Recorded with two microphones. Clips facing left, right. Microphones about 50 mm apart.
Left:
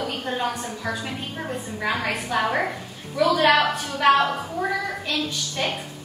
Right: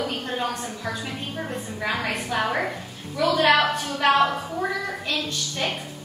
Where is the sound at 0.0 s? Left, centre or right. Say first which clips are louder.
Left 1 dB; centre.